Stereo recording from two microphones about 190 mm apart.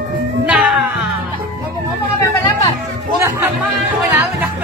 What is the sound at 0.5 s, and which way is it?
Music, 5° right (ahead or behind).